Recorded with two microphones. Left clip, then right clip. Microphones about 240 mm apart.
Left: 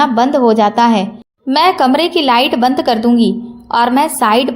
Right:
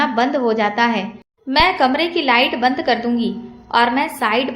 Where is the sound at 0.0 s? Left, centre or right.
Left.